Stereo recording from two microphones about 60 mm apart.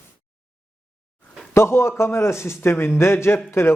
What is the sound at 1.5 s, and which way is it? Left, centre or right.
A man's voice, left.